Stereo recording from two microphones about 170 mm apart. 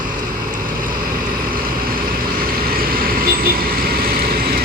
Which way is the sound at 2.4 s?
60° right (ahead or behind).